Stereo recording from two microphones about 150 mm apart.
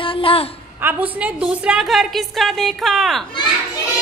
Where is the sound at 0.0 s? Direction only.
35° left (ahead or behind).